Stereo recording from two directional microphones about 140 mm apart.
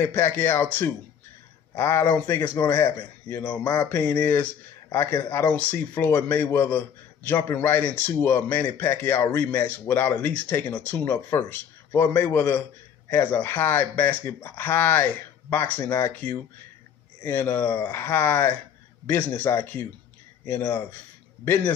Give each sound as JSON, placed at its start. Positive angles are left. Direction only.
{"t": 0.0, "sound": "a man's voice", "side_deg": 15}